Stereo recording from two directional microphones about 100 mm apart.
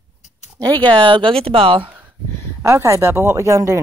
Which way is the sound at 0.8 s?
55° right (ahead or behind).